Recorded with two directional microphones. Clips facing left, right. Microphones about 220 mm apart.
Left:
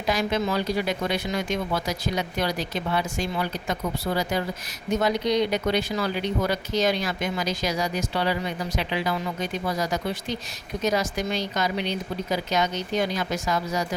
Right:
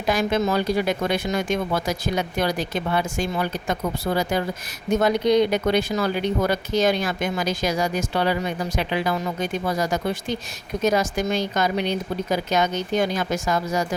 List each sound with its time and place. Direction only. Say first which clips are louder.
0.1 s speech: right 3 dB; 50° right (ahead or behind)